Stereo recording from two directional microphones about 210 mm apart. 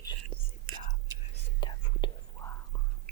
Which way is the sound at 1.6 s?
20° left (ahead or behind).